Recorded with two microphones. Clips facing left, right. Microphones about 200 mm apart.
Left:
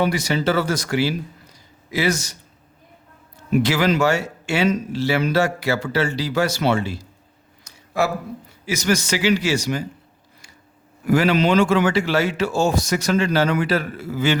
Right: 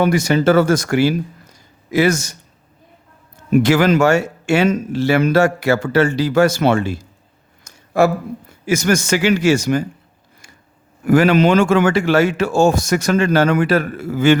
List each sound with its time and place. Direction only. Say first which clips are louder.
0.0 s speech: right 6 dB; 50° right (ahead or behind)
3.5 s speech: right 5 dB; 50° right (ahead or behind)
11.0 s speech: right 5 dB; 50° right (ahead or behind)